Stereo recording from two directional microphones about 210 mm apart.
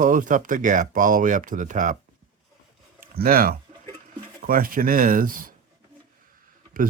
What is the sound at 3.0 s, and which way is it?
Speech, 45° right (ahead or behind).